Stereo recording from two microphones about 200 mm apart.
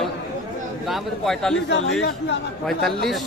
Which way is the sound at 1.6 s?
60° left (ahead or behind).